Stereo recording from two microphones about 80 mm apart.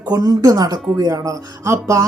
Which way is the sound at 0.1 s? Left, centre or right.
Right.